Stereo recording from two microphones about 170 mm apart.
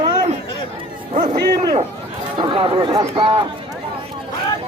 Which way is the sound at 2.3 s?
30° right (ahead or behind).